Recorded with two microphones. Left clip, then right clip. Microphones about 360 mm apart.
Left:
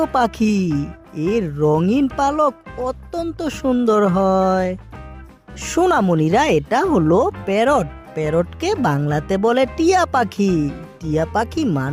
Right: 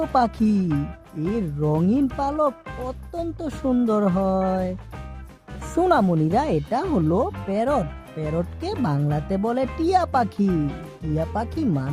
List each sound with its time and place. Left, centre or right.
0.1 s speech: centre
0.7 s speech: centre
1.4 s speech: left
5.7 s speech: centre
10.4 s speech: centre
11.1 s speech: centre